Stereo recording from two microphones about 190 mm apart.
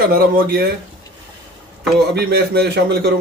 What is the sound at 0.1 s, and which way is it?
Speech, 55° right (ahead or behind).